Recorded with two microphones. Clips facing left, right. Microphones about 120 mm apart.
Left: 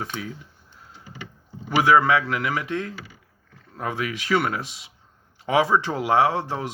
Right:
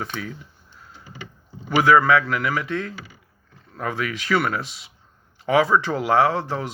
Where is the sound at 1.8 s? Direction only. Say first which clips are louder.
Right 2 dB; 20° left (ahead or behind).